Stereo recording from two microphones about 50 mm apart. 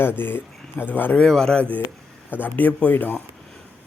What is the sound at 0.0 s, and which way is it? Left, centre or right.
Speech, left.